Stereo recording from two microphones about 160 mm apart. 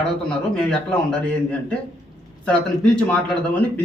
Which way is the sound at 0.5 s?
5° left (ahead or behind).